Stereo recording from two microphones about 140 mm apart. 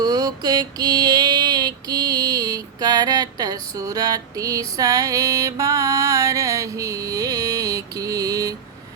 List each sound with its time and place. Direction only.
0.0 s mantra: 25° right (ahead or behind)